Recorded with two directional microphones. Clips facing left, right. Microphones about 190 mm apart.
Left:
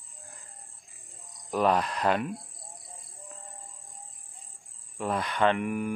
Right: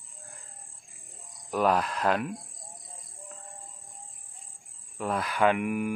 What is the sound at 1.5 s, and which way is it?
Speech, centre (ahead or behind).